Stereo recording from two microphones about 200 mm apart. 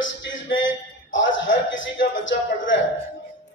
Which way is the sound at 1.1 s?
70° left (ahead or behind).